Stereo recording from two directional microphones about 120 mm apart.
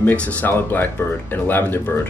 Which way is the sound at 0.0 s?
10° left (ahead or behind).